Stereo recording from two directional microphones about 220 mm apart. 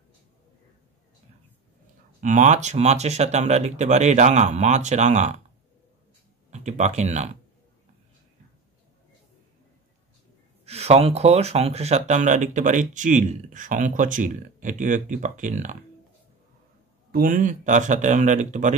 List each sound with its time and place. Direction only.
2.2 s speech: 35° right (ahead or behind)
6.5 s speech: 30° right (ahead or behind)
10.6 s speech: 30° right (ahead or behind)
17.1 s speech: 40° right (ahead or behind)